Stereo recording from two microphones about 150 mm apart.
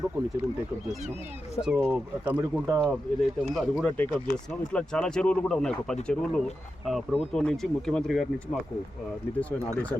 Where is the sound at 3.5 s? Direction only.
Centre (ahead or behind).